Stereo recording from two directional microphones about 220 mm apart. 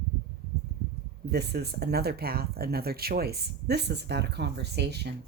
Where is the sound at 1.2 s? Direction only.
50° right (ahead or behind).